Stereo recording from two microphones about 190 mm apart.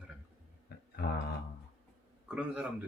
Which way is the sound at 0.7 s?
60° left (ahead or behind).